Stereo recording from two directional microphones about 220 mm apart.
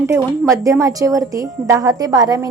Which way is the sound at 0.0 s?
10° right (ahead or behind).